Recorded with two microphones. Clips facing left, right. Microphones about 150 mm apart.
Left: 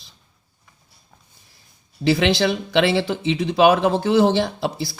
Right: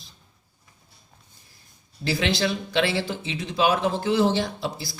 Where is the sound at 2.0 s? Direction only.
65° left (ahead or behind).